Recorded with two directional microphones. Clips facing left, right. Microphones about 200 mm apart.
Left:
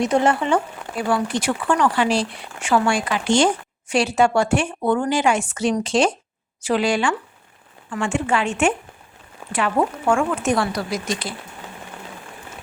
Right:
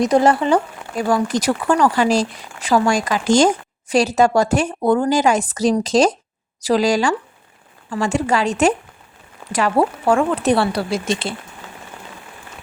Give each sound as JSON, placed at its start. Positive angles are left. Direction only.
{"t": 0.0, "sound": "speech", "side_deg": -40}